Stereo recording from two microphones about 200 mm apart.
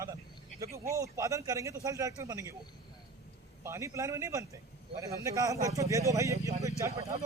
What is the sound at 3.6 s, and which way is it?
A man's voice, 15° right (ahead or behind).